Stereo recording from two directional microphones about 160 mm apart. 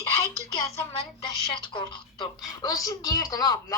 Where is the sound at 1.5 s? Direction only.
30° left (ahead or behind).